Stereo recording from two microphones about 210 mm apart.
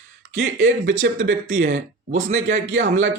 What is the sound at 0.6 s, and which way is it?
Speech, 65° right (ahead or behind).